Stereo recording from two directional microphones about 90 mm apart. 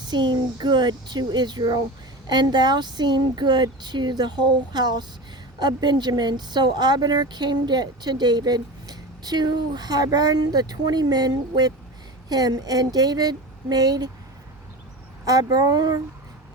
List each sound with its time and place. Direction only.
0.1 s a woman's voice: 55° right (ahead or behind)
15.2 s a woman's voice: 40° right (ahead or behind)